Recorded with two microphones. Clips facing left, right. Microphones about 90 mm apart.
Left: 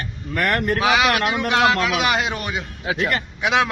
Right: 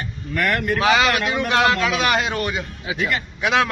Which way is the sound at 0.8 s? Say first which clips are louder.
Right 2 dB; 10° left (ahead or behind).